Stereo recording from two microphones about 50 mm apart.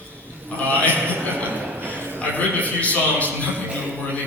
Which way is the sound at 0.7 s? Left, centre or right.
Left.